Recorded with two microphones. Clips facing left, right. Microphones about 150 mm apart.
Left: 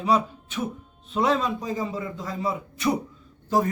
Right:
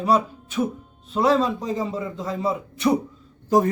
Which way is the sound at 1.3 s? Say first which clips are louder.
Right 4 dB; 25° right (ahead or behind).